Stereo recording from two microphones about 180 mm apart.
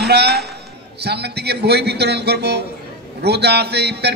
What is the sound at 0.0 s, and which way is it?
A man's voice, 65° right (ahead or behind).